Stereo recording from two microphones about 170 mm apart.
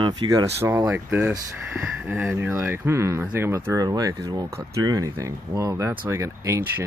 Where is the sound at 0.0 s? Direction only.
25° right (ahead or behind).